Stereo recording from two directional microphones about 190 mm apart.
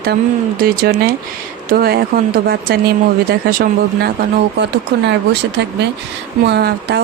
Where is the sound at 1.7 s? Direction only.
55° right (ahead or behind).